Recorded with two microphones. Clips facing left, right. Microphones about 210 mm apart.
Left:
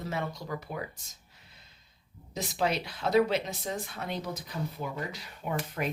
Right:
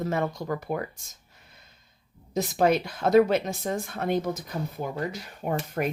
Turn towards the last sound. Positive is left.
turn(degrees=-50)  # may be behind; listen again after turning